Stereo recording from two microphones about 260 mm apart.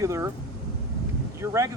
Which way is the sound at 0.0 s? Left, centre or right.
Centre.